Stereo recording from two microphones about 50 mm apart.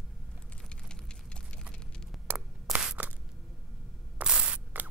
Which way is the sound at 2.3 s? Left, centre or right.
Right.